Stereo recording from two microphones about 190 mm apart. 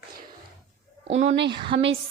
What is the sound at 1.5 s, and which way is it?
Speech, 25° right (ahead or behind).